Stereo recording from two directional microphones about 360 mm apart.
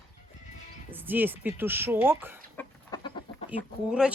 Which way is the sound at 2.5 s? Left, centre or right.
Centre.